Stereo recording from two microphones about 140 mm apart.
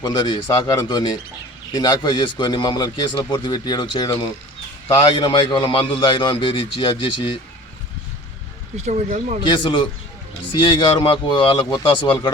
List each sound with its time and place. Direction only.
0.0 s a man's voice: 30° left (ahead or behind)
8.7 s speech: 55° right (ahead or behind)
9.5 s a man's voice: 35° left (ahead or behind)